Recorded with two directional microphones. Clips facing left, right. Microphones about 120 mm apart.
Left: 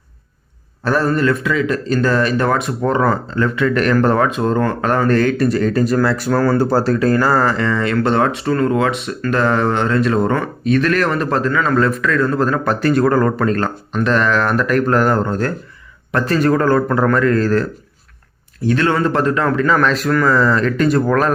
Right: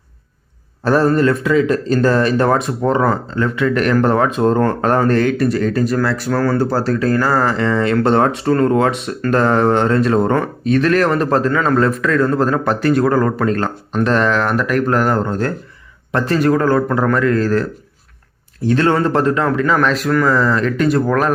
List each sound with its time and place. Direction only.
0.9 s speech: 35° right (ahead or behind)
2.8 s speech: 20° right (ahead or behind)
4.3 s speech: 35° right (ahead or behind)
5.2 s speech: 10° right (ahead or behind)
7.4 s speech: 25° right (ahead or behind)
13.9 s speech: 35° right (ahead or behind)
16.4 s speech: 10° right (ahead or behind)
18.6 s speech: 30° right (ahead or behind); by 21.3 s 10° right (ahead or behind)